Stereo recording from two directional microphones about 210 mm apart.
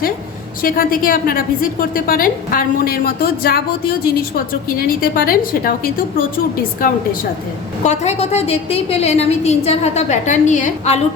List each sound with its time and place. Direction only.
0.6 s a woman's voice: 45° left (ahead or behind)
7.9 s a woman's voice: 30° left (ahead or behind)